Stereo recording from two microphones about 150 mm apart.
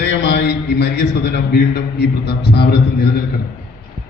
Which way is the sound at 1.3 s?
90° left.